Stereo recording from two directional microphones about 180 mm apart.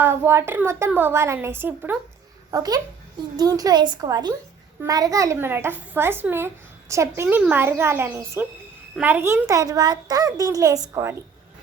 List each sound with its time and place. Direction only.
0.0 s a child's voice: 10° right (ahead or behind)
2.5 s a child's voice: 20° right (ahead or behind)